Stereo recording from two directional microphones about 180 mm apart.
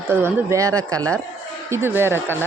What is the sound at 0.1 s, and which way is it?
A woman's voice, 15° right (ahead or behind).